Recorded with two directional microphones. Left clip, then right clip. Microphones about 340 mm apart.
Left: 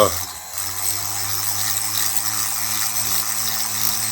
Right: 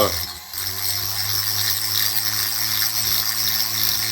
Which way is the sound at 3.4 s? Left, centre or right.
Centre.